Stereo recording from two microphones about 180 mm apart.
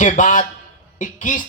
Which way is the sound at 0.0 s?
45° left (ahead or behind).